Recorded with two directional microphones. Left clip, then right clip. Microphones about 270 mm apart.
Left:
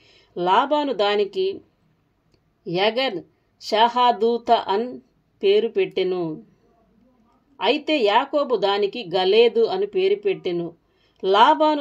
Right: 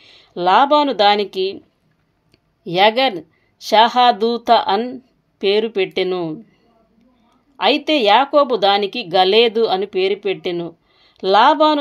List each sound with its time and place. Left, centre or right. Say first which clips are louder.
0.1 s speech: right 5 dB; right
2.6 s speech: right 7 dB; right
7.5 s speech: right 5 dB; right